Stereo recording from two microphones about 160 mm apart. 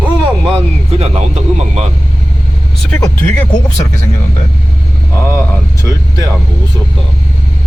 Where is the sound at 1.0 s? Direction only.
40° right (ahead or behind).